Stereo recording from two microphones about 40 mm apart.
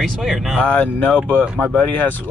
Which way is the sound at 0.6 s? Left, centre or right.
Left.